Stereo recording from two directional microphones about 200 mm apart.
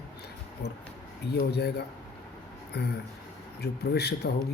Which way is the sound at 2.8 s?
55° left (ahead or behind).